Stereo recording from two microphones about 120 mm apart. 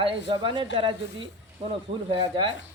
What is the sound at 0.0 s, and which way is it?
Speech, 45° right (ahead or behind).